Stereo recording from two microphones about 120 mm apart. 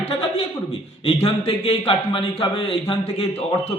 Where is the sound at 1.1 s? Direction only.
60° left (ahead or behind).